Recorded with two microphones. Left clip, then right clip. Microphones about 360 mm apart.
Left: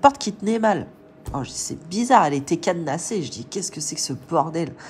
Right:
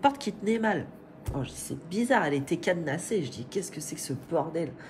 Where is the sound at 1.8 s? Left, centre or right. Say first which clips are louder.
Left 9 dB; centre.